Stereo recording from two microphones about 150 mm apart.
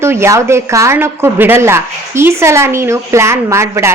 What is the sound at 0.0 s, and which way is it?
A woman's voice, 15° right (ahead or behind).